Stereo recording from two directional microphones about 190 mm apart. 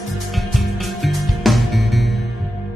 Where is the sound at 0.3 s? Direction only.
Centre (ahead or behind).